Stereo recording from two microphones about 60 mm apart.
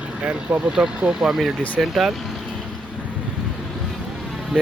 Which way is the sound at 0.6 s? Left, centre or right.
Centre.